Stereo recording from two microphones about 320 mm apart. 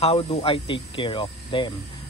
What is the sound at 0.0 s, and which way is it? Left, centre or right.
Speech, centre.